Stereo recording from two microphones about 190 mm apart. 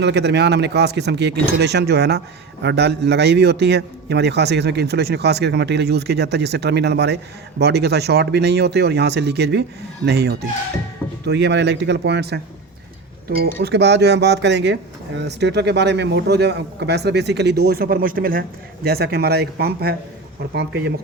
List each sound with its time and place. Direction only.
0.0 s speech: 65° right (ahead or behind)